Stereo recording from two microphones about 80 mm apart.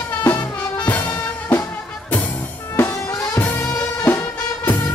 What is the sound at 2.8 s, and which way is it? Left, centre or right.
Music, left.